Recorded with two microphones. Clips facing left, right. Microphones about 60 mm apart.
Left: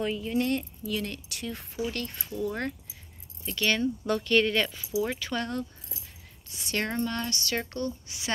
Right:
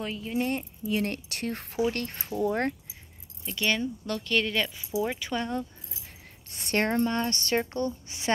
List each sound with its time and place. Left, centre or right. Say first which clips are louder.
0.0 s speech: left 4 dB; centre
0.3 s speech: right 1 dB; centre
0.9 s speech: right 5 dB; right
1.9 s a woman's voice: right 4 dB; right
3.4 s speech: left 1 dB; centre
4.0 s speech: left 4 dB; centre
5.0 s speech: right 1 dB; centre
6.5 s speech: right 4 dB; right
7.1 s a woman's voice: right 4 dB; right